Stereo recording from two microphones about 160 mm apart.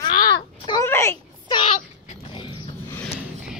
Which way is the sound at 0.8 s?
15° left (ahead or behind).